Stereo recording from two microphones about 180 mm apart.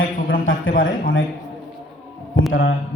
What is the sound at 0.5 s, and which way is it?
Speech, 90° left.